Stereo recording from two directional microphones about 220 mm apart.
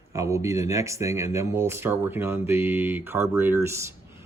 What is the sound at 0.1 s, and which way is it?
Speech, 15° right (ahead or behind).